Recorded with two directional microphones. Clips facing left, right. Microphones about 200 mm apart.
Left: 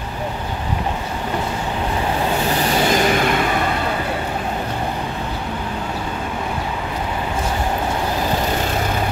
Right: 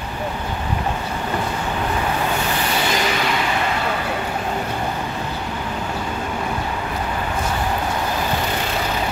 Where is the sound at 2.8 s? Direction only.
50° left (ahead or behind).